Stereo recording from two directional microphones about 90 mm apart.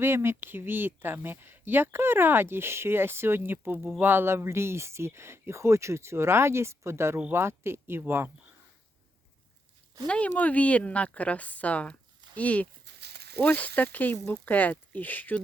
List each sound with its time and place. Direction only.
0.0 s speech: 25° right (ahead or behind)
10.1 s a woman's voice: 15° left (ahead or behind)